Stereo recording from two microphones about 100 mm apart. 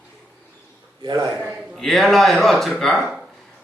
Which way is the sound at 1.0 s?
45° right (ahead or behind).